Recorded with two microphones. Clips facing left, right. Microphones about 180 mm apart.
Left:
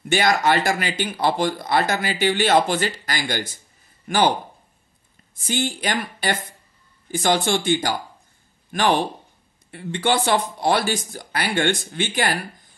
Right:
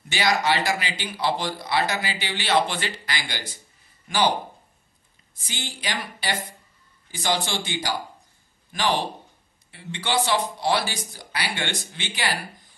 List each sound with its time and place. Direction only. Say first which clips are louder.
0.1 s speech: left 4 dB; 50° left (ahead or behind)
5.3 s speech: left 12 dB; 50° left (ahead or behind)
9.7 s speech: left 7 dB; 50° left (ahead or behind)